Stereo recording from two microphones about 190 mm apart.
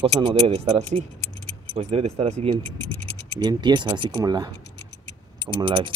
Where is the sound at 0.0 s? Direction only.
30° right (ahead or behind).